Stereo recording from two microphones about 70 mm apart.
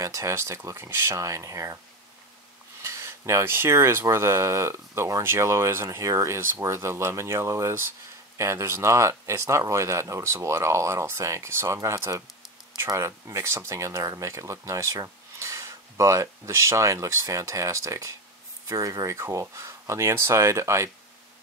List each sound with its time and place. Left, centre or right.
0.0 s speech: right
2.8 s speech: right
14.2 s speech: right